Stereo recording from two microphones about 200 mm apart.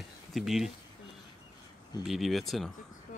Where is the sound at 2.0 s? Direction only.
Centre (ahead or behind).